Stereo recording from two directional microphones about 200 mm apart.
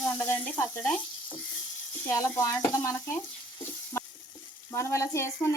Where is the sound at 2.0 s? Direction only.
15° left (ahead or behind).